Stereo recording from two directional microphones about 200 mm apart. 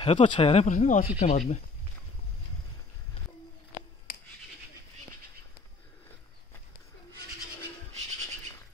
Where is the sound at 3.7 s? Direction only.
40° left (ahead or behind).